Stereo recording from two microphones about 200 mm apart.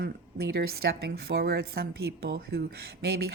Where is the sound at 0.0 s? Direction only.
50° right (ahead or behind).